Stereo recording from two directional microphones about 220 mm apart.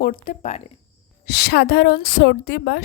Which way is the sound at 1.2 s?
45° left (ahead or behind).